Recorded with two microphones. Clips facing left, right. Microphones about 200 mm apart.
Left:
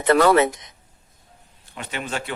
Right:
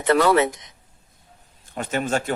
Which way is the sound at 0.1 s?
50° left (ahead or behind).